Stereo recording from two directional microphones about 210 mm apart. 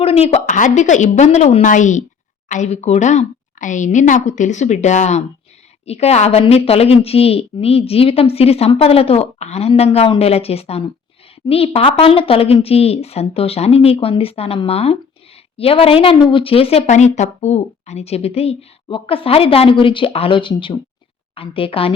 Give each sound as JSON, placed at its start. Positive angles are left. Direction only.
{"t": 0.0, "sound": "a woman's voice", "side_deg": 30}